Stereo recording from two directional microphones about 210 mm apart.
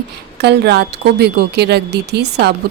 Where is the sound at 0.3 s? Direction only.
50° right (ahead or behind).